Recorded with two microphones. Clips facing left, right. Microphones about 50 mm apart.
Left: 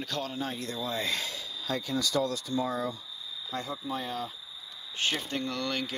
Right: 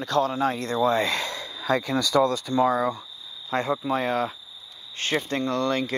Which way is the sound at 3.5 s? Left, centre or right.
Right.